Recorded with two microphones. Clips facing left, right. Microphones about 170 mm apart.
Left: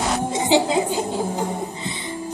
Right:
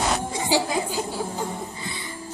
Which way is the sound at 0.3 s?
20° left (ahead or behind).